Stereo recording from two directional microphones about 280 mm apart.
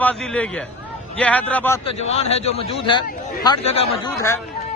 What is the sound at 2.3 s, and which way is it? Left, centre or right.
Speech, left.